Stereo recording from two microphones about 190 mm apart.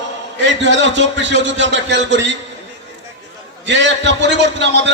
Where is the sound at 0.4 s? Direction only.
70° right (ahead or behind).